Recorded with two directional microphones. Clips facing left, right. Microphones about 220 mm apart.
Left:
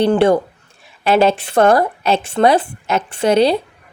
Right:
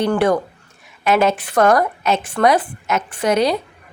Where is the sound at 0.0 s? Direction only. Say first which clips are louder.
Left 4 dB; 25° left (ahead or behind).